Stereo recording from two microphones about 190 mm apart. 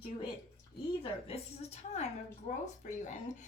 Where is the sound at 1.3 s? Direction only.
35° left (ahead or behind).